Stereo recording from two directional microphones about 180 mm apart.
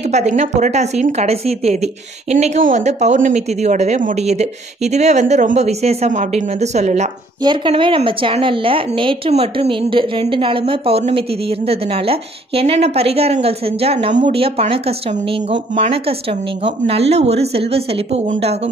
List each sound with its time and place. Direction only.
0.0 s speech: 40° right (ahead or behind)
7.4 s speech: 30° right (ahead or behind)